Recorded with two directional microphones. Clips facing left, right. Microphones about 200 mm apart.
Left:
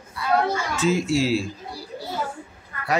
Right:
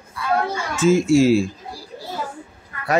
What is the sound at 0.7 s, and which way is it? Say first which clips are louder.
Speech: right 9 dB; 50° right (ahead or behind).